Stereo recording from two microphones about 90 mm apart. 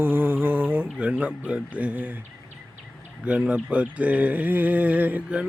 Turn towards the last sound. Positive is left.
turn(degrees=-15)  # may be behind; listen again after turning